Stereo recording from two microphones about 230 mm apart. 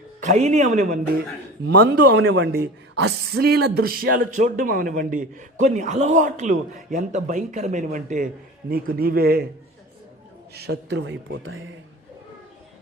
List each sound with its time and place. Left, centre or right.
0.2 s speech: right
1.6 s speech: right
2.1 s speech: right
10.5 s speech: right